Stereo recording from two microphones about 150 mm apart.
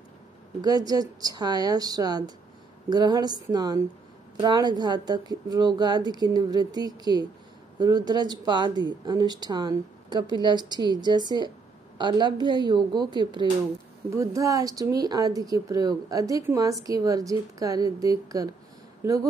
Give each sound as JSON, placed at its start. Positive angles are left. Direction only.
{"t": 0.6, "sound": "speech", "side_deg": -25}